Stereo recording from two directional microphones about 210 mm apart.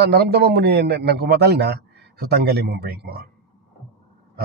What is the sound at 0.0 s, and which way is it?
A man's voice, 50° right (ahead or behind).